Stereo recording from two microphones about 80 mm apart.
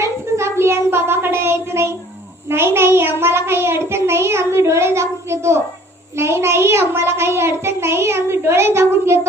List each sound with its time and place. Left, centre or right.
0.0 s child singing: right
2.5 s a child's voice: right